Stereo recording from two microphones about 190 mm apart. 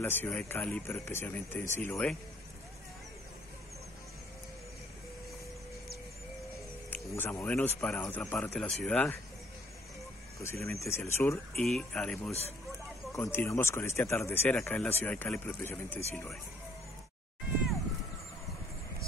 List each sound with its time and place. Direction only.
0.0 s speech: 10° left (ahead or behind)
6.9 s speech: 10° left (ahead or behind)
10.4 s speech: 15° left (ahead or behind)
12.3 s speech: 35° left (ahead or behind)
13.1 s speech: 10° left (ahead or behind)